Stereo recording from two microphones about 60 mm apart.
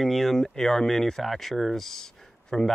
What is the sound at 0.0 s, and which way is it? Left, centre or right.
Speech, centre.